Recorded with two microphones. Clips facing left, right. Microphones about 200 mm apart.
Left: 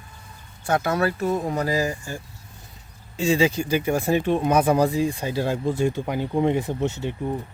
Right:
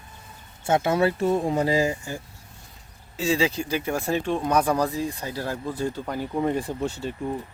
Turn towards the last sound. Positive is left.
turn(degrees=20)  # may be behind; listen again after turning